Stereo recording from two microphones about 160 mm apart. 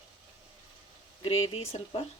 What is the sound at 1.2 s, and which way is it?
Speech, 40° left (ahead or behind).